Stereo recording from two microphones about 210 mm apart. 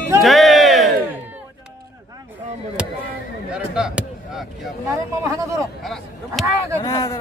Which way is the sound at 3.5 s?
5° right (ahead or behind).